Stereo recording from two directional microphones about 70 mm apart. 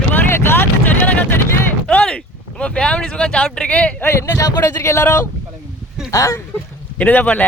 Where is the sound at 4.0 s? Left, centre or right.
Left.